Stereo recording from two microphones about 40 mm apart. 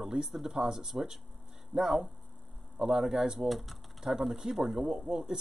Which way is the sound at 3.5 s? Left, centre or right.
Centre.